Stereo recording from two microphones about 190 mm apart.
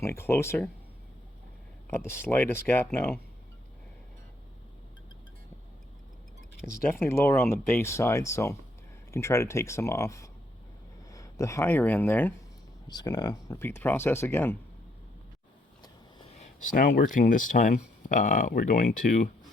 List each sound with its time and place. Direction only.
0.0 s speech: 15° left (ahead or behind)
1.9 s speech: 15° left (ahead or behind)
6.9 s speech: 15° left (ahead or behind)
12.9 s speech: 20° left (ahead or behind)
16.4 s speech: 40° left (ahead or behind)